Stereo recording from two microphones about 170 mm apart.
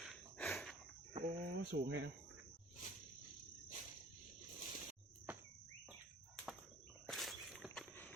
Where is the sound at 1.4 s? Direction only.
70° right (ahead or behind).